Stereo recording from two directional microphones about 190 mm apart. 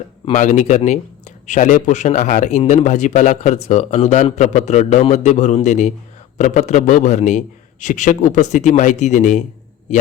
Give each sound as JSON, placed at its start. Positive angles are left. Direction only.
{"t": 0.3, "sound": "a man's voice", "side_deg": 40}